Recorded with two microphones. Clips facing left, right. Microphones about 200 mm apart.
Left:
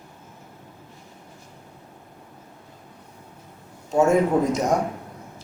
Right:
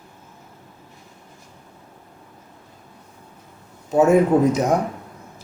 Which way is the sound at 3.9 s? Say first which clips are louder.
Right 3 dB; 5° right (ahead or behind).